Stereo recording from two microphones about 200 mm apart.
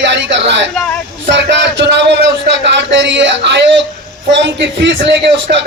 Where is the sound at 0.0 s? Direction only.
60° right (ahead or behind).